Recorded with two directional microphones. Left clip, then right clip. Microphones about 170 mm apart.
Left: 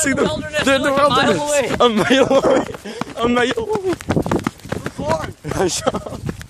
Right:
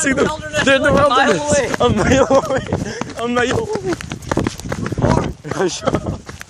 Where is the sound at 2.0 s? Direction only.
25° left (ahead or behind).